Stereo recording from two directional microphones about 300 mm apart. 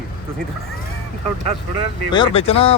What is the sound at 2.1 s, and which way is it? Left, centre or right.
Speech, centre.